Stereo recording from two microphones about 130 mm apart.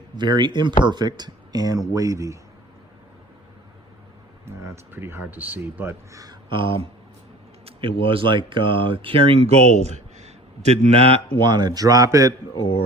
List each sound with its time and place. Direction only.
0.2 s speech: 35° right (ahead or behind)
4.4 s speech: 20° right (ahead or behind)
6.5 s speech: 40° right (ahead or behind)
11.3 s speech: 35° right (ahead or behind)
12.5 s speech: 40° left (ahead or behind)